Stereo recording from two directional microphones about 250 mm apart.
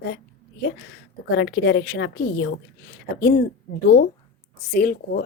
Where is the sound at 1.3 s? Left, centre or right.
Left.